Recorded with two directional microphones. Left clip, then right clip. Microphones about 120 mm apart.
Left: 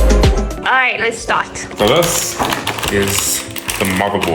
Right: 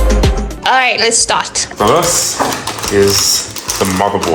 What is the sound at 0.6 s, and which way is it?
Music, 20° right (ahead or behind).